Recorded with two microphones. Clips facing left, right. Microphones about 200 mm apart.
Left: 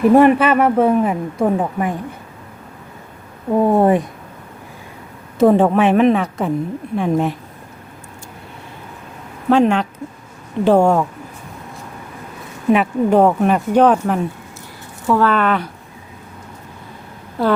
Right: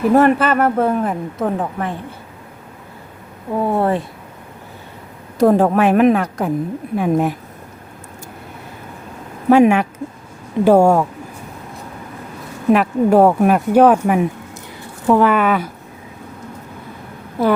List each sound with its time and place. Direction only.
0.1 s speech: 5° left (ahead or behind)
3.5 s speech: 20° left (ahead or behind)
5.4 s a woman's voice: centre (ahead or behind)
9.5 s speech: 10° right (ahead or behind)
12.7 s speech: 5° right (ahead or behind)